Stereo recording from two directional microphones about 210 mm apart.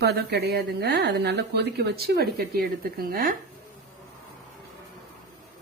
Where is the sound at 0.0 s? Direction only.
50° right (ahead or behind).